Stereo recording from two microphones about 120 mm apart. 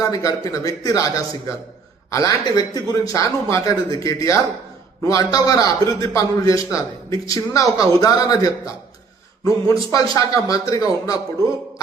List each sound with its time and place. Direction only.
0.0 s speech: 30° left (ahead or behind)